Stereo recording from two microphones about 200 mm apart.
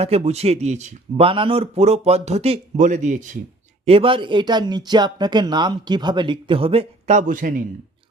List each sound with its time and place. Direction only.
0.0 s speech: 30° right (ahead or behind)
3.8 s speech: 25° right (ahead or behind)